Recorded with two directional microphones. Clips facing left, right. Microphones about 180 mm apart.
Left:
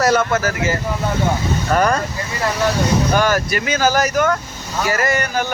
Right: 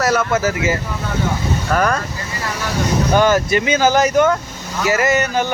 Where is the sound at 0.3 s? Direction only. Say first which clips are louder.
Right 2 dB; 20° right (ahead or behind).